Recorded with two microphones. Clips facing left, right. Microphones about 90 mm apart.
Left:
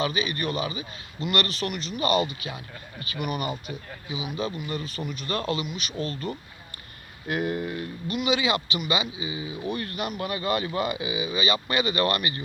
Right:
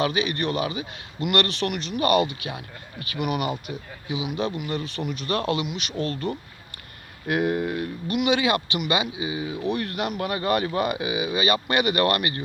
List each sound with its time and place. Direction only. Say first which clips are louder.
0.0 s a man's voice: right 3 dB; 60° right (ahead or behind)